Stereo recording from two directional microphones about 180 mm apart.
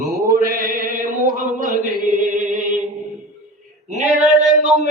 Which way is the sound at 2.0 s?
50° right (ahead or behind).